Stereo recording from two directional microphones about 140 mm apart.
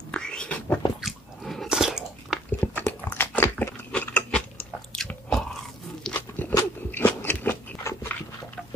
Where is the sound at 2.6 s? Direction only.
15° left (ahead or behind).